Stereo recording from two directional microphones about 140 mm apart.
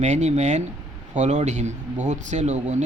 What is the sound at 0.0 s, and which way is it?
A man's voice, 55° right (ahead or behind).